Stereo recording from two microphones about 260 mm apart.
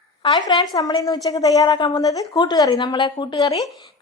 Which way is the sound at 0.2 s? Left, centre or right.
Centre.